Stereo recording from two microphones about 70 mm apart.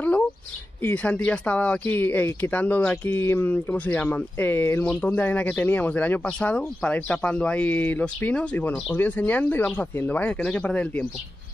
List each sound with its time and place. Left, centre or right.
0.8 s speech: left